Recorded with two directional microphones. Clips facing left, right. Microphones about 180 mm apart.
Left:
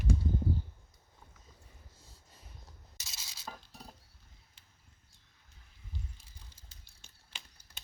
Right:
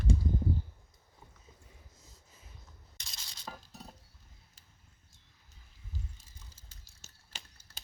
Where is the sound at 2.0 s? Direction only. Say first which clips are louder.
Even; 30° left (ahead or behind).